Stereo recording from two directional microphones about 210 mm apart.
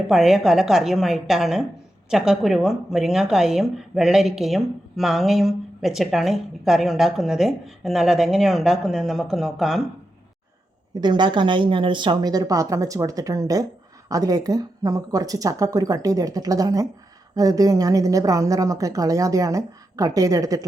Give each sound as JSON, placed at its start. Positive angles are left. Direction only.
{"t": 0.1, "sound": "a woman's voice", "side_deg": 0}
{"t": 11.0, "sound": "a woman's voice", "side_deg": -20}